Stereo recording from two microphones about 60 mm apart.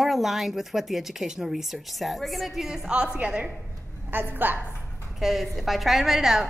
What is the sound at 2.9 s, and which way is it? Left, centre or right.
Speech, centre.